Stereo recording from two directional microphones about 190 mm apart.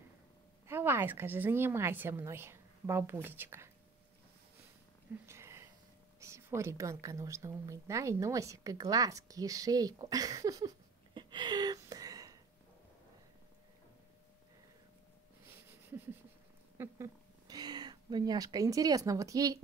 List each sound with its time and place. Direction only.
0.7 s speech: 10° right (ahead or behind)
5.1 s a sound: 15° right (ahead or behind)
6.1 s speech: 15° right (ahead or behind)
11.1 s a sound: 25° right (ahead or behind)
15.4 s wheeze: 10° right (ahead or behind)
16.7 s speech: 15° right (ahead or behind)